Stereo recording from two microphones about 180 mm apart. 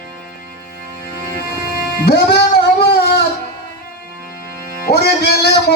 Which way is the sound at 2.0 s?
65° left (ahead or behind).